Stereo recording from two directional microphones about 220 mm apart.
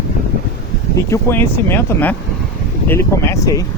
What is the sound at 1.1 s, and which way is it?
Speech, 10° left (ahead or behind).